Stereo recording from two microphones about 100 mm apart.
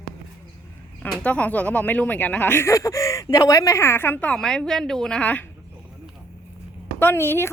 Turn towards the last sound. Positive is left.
turn(degrees=25)  # may be behind; listen again after turning